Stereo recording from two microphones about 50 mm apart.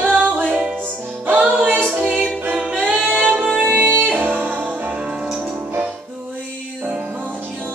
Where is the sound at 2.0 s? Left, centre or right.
Centre.